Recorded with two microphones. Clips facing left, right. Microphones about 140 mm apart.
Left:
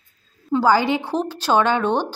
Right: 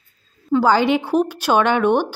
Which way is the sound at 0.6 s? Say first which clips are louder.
Right 1 dB; 20° right (ahead or behind).